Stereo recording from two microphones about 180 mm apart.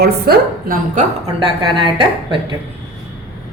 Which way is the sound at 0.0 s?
60° right (ahead or behind).